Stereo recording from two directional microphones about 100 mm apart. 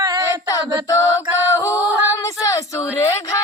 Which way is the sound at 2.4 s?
30° left (ahead or behind).